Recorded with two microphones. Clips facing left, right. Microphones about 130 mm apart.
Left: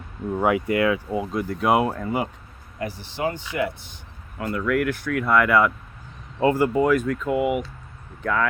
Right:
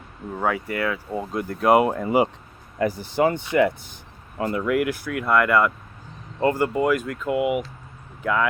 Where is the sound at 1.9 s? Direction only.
15° right (ahead or behind).